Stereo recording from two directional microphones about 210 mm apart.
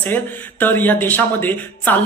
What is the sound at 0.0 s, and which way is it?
Speech, 10° left (ahead or behind).